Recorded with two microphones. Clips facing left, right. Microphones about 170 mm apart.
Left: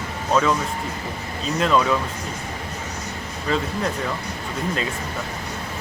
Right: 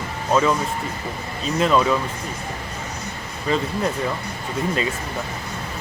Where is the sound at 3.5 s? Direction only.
Centre (ahead or behind).